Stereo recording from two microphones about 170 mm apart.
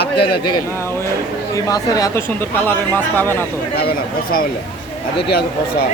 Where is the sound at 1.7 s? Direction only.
20° left (ahead or behind).